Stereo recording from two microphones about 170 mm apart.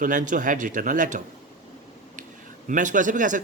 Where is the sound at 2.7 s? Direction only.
50° right (ahead or behind).